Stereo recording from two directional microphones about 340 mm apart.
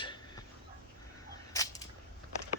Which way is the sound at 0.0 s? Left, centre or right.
Centre.